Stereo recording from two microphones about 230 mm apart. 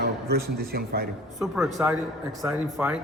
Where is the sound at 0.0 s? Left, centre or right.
Right.